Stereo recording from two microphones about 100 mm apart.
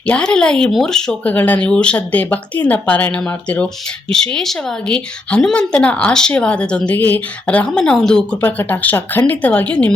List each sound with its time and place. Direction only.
0.1 s a woman's voice: 10° left (ahead or behind)
1.3 s a woman's voice: 15° left (ahead or behind)
4.1 s a woman's voice: 5° left (ahead or behind)
8.4 s a woman's voice: 20° left (ahead or behind)